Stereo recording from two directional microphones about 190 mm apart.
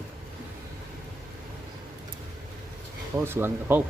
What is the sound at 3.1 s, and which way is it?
Speech, 10° right (ahead or behind).